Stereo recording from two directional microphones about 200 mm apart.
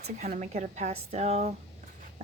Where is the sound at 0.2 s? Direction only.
35° right (ahead or behind).